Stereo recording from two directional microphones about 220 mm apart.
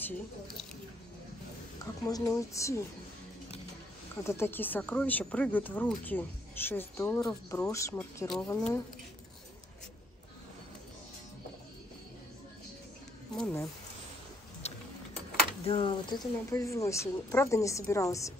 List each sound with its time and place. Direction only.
2.0 s speech: 15° left (ahead or behind)
4.2 s speech: 10° left (ahead or behind)
13.4 s speech: 10° left (ahead or behind)
14.6 s tick-tock: 30° left (ahead or behind)
15.6 s speech: 25° left (ahead or behind)